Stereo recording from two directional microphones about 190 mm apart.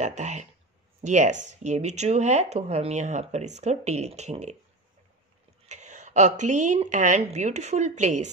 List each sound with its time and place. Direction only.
0.0 s speech: 35° right (ahead or behind)
5.7 s speech: 40° right (ahead or behind)